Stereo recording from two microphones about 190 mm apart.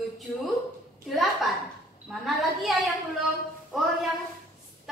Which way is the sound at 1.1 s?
Centre (ahead or behind).